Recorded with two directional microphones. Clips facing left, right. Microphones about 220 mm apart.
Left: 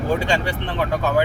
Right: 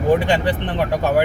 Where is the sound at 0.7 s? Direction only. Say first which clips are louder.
Even; 20° right (ahead or behind).